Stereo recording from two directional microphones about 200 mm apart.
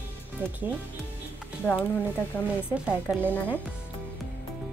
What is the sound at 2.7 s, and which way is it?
Speech, 5° right (ahead or behind).